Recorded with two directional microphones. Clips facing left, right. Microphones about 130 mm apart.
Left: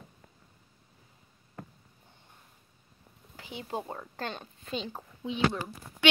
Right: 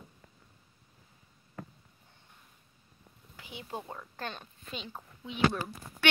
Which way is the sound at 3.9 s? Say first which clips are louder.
Left 3 dB; 30° left (ahead or behind).